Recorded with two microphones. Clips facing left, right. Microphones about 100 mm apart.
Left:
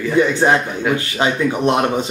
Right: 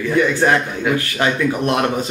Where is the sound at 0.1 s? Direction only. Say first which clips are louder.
Left 1 dB; 20° left (ahead or behind).